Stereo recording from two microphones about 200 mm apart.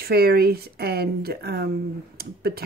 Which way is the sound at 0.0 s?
50° right (ahead or behind).